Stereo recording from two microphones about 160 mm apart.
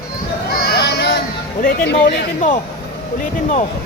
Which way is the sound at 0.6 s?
90° left.